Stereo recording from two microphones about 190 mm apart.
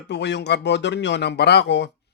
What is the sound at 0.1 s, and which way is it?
Speech, 65° left (ahead or behind).